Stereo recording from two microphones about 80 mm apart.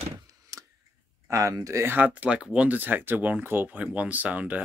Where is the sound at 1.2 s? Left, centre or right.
Right.